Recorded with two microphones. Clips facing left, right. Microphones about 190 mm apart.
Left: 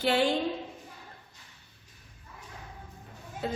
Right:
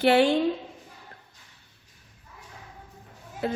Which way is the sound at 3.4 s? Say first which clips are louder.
Right 4 dB; 65° right (ahead or behind).